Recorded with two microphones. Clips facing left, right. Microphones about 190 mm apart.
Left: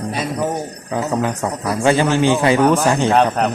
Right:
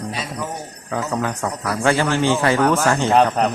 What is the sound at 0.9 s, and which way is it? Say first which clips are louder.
A man's voice: left 3 dB; 20° left (ahead or behind).